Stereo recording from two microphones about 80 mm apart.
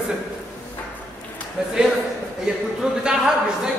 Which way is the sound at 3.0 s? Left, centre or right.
Centre.